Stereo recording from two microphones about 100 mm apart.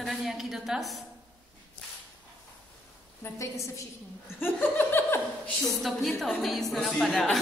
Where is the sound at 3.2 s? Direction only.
30° left (ahead or behind).